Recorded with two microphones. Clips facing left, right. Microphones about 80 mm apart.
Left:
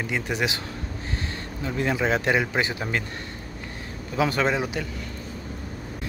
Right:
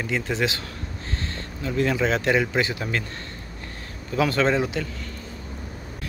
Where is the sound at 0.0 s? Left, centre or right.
Centre.